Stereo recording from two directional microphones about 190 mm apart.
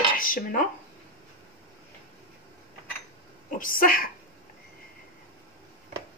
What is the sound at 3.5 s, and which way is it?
Speech, 45° left (ahead or behind).